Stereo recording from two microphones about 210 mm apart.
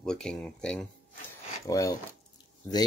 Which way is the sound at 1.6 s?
15° left (ahead or behind).